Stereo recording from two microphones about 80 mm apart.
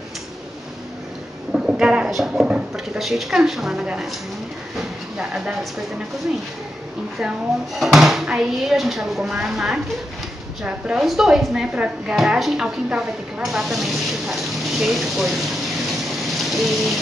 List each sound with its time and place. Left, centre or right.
1.5 s speech: centre
5.1 s a woman's voice: centre
7.8 s a woman's voice: centre
16.3 s rain: centre